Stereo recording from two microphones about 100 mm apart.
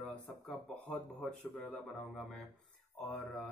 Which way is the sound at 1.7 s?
Centre (ahead or behind).